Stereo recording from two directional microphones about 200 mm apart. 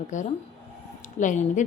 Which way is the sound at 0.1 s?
40° left (ahead or behind).